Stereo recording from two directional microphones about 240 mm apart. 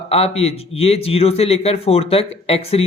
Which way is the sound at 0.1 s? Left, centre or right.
Left.